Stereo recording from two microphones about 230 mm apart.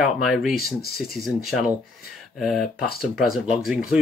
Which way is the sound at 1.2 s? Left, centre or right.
Centre.